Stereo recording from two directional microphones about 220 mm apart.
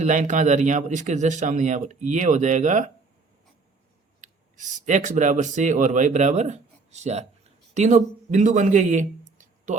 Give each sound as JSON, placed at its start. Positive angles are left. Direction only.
{"t": 0.0, "sound": "speech", "side_deg": -35}
{"t": 4.2, "sound": "speech", "side_deg": -35}